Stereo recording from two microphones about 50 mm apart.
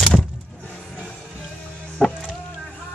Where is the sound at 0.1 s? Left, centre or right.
Left.